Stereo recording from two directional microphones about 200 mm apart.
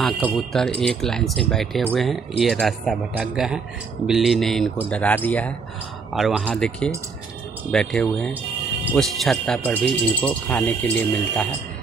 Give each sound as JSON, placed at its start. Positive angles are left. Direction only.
{"t": 0.0, "sound": "speech", "side_deg": 0}